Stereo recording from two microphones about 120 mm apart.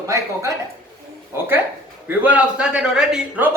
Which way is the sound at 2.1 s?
10° right (ahead or behind).